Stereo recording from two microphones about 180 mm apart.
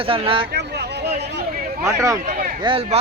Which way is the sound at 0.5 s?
65° right (ahead or behind).